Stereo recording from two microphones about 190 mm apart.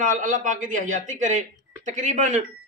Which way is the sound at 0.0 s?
45° right (ahead or behind).